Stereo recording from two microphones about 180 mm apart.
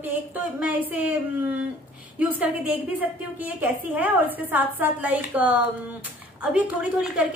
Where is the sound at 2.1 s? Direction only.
10° right (ahead or behind).